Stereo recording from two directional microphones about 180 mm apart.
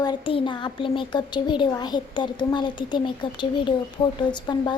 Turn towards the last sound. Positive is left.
turn(degrees=25)  # may be behind; listen again after turning